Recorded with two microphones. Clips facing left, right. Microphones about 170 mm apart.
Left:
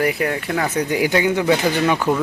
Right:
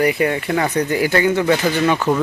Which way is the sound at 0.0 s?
Centre (ahead or behind).